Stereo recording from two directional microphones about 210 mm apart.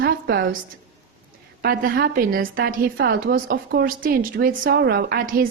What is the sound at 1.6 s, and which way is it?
A woman's voice, 45° right (ahead or behind).